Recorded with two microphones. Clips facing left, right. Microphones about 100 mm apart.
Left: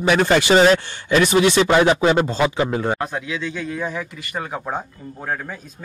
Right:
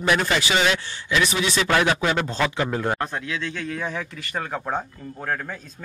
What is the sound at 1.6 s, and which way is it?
Speech, 20° left (ahead or behind).